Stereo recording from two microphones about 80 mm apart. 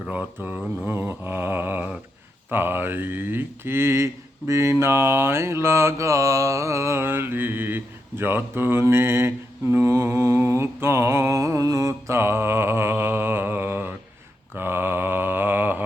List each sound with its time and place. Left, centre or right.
0.1 s a sound: right
2.5 s speech: right
14.5 s mantra: right